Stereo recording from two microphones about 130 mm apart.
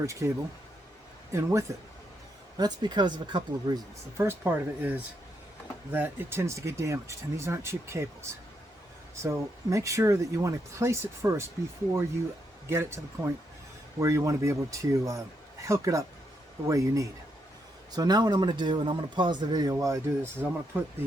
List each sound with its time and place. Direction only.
0.0 s speech: 25° right (ahead or behind)
1.3 s speech: 25° right (ahead or behind)
2.6 s a man's voice: 35° right (ahead or behind)
4.2 s speech: 20° right (ahead or behind)
12.6 s a man's voice: 20° right (ahead or behind)
19.7 s speech: 20° right (ahead or behind)